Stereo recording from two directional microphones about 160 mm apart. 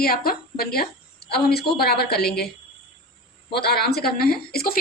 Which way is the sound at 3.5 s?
90° left.